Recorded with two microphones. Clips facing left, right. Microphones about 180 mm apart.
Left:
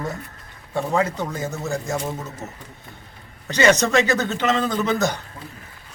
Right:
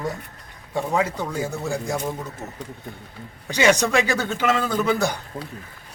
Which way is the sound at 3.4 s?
10° right (ahead or behind).